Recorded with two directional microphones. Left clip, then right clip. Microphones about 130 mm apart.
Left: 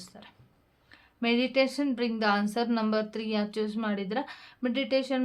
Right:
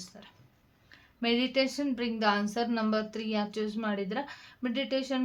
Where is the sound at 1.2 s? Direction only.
30° left (ahead or behind).